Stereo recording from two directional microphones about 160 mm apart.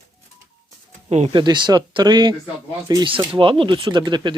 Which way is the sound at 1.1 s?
45° right (ahead or behind).